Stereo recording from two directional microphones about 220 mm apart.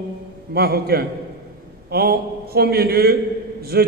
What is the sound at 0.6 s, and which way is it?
A man's voice, 45° right (ahead or behind).